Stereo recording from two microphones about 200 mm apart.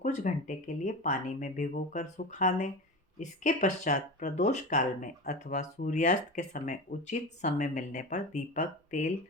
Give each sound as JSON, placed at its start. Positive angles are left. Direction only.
{"t": 0.0, "sound": "speech", "side_deg": 40}